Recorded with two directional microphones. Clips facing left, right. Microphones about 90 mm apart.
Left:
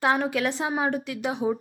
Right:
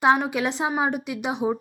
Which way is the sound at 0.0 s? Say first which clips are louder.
Right 3 dB; 20° right (ahead or behind).